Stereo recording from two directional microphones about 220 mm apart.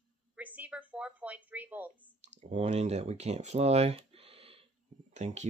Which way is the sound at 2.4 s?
30° right (ahead or behind).